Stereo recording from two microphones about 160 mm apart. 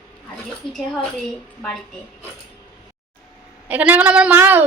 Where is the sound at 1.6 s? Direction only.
5° left (ahead or behind).